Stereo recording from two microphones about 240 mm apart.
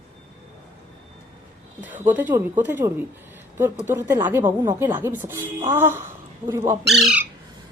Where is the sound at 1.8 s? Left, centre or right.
Centre.